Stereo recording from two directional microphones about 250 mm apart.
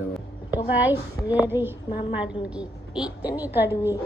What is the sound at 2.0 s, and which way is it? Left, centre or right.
Speech, left.